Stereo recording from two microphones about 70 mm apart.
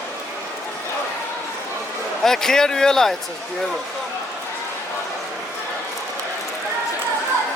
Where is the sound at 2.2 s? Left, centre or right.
Centre.